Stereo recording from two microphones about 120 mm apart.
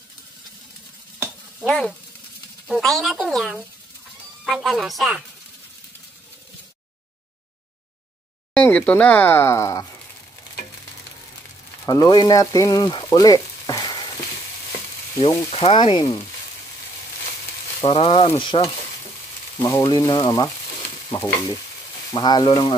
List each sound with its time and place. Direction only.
1.7 s speech: 5° left (ahead or behind)
8.5 s speech: 10° left (ahead or behind)
11.8 s speech: 30° left (ahead or behind)
13.0 s frying: 30° left (ahead or behind)
15.2 s frying: 55° left (ahead or behind)
15.7 s speech: 40° left (ahead or behind)
17.8 s stir: 45° left (ahead or behind)
19.5 s speech: 35° left (ahead or behind)
21.1 s stir: 30° left (ahead or behind)
22.1 s speech: 35° left (ahead or behind)